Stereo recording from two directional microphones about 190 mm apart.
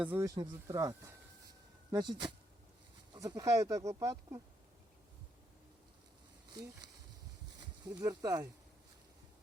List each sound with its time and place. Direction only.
0.0 s speech: 10° right (ahead or behind)
7.6 s speech: 20° right (ahead or behind)